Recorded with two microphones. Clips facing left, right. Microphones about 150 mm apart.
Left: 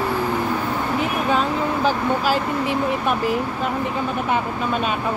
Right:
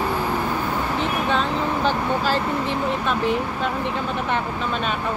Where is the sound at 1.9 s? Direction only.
10° left (ahead or behind).